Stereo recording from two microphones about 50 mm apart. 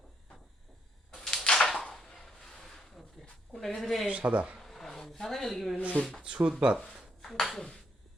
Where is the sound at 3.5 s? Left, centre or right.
Left.